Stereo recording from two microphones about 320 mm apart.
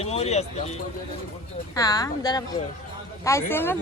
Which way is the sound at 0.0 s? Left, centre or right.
Centre.